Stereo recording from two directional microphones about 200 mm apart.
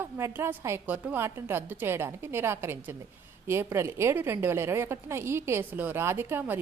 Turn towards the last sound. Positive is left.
turn(degrees=-10)  # may be behind; listen again after turning